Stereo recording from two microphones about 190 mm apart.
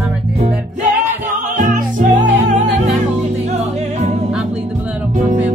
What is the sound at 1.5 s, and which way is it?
Music, 40° right (ahead or behind).